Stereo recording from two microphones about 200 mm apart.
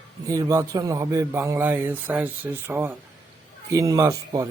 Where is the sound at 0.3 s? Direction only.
15° right (ahead or behind).